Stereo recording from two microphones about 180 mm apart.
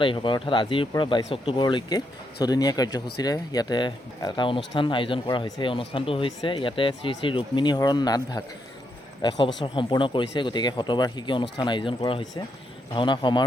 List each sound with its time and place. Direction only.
0.0 s speech: 30° left (ahead or behind)